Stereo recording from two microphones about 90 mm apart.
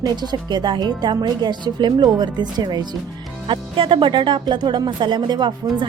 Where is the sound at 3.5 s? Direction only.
75° right (ahead or behind); by 5.9 s 55° right (ahead or behind).